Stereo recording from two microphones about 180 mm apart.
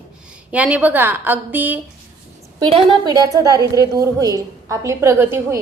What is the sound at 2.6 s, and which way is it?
A woman's voice, 25° right (ahead or behind).